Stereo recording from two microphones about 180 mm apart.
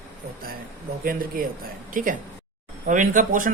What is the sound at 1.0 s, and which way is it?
Speech, 55° right (ahead or behind).